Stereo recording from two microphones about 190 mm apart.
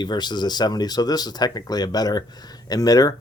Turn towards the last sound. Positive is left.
turn(degrees=20)  # may be behind; listen again after turning